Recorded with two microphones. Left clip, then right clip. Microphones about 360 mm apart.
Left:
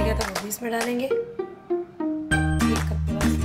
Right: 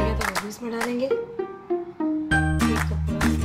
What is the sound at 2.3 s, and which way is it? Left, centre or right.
Music, centre.